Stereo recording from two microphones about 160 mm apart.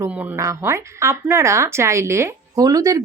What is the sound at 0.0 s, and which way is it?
Speech, 20° right (ahead or behind).